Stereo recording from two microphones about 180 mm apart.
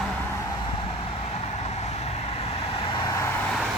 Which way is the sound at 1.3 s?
35° left (ahead or behind).